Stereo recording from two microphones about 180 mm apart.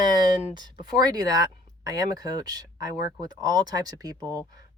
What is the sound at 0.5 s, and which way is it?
Speech, 20° right (ahead or behind).